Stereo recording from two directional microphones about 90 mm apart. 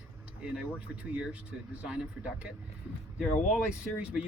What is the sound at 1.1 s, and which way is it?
Speech, 15° right (ahead or behind).